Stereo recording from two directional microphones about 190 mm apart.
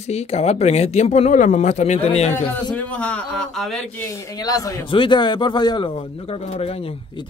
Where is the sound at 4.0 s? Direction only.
15° left (ahead or behind).